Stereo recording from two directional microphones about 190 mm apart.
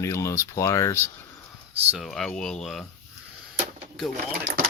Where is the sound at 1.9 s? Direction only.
Centre (ahead or behind).